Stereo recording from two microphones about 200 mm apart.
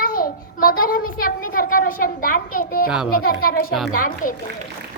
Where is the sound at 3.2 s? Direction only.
50° left (ahead or behind).